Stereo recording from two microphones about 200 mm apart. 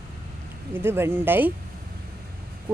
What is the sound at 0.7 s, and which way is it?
Speech, 10° right (ahead or behind).